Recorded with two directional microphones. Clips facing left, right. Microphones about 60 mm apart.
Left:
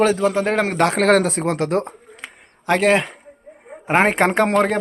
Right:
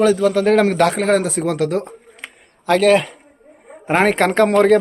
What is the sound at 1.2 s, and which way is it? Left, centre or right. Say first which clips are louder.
Speech: right 1 dB; left.